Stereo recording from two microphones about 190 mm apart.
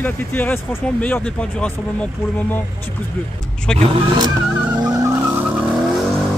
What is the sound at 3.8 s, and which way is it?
Speech, 25° right (ahead or behind).